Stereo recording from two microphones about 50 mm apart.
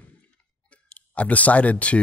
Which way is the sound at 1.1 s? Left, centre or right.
Left.